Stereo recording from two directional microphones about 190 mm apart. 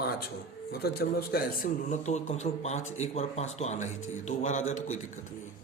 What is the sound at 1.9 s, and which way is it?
Speech, 40° left (ahead or behind).